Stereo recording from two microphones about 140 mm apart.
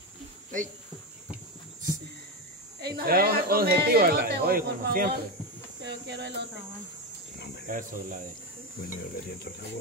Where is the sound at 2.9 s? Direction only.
90° right.